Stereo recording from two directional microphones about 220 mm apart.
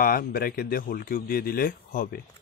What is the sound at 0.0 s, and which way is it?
Speech, 40° left (ahead or behind).